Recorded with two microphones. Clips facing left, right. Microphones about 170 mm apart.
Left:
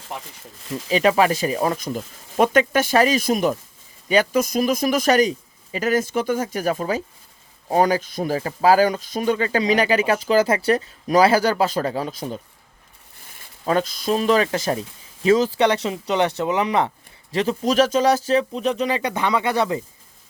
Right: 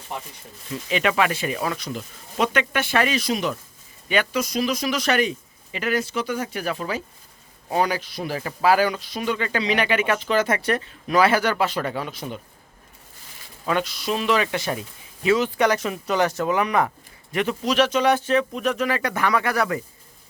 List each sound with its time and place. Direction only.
0.9 s speech: 35° left (ahead or behind)
13.7 s speech: 35° left (ahead or behind)
17.7 s speech: 40° left (ahead or behind); by 19.8 s 25° left (ahead or behind)